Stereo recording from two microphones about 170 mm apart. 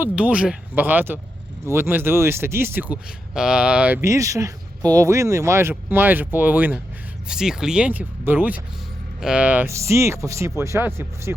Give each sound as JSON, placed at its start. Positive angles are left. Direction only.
{"t": 0.0, "sound": "speech", "side_deg": -10}